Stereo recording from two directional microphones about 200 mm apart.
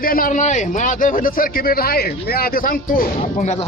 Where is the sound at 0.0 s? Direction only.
45° left (ahead or behind).